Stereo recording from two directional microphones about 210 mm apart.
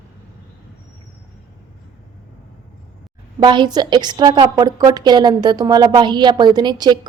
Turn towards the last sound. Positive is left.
turn(degrees=-20)  # may be behind; listen again after turning